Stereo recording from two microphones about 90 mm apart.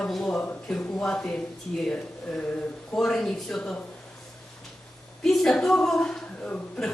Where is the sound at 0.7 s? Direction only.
10° left (ahead or behind).